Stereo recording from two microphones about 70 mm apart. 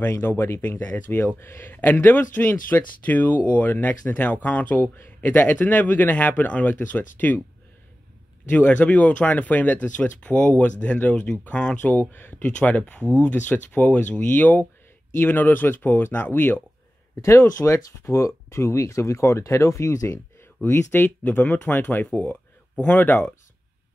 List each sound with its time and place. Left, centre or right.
0.0 s speech: left
8.5 s speech: left
17.1 s speech: left
17.7 s speech: left
18.2 s speech: left
20.1 s speech: left